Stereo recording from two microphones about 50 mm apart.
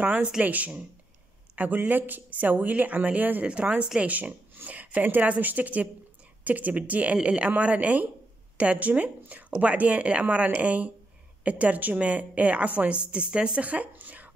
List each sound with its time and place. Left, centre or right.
0.4 s speech: right
3.4 s a woman's voice: right